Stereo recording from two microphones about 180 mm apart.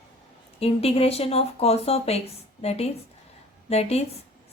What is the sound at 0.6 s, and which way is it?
A woman's voice, 35° left (ahead or behind).